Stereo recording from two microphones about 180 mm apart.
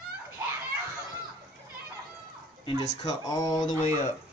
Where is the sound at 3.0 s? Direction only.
20° left (ahead or behind).